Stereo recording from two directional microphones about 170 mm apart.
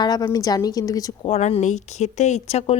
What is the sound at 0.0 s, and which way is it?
A woman's voice, 25° left (ahead or behind).